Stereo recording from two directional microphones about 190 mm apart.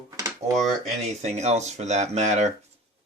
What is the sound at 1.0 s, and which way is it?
Speech, 35° right (ahead or behind).